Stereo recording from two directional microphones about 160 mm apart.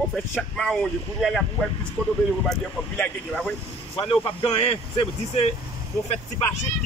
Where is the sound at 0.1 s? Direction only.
5° left (ahead or behind).